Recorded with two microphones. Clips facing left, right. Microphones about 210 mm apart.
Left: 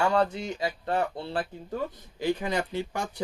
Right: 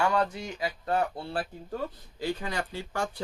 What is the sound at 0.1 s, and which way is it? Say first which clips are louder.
Speech: left 3 dB; 25° left (ahead or behind).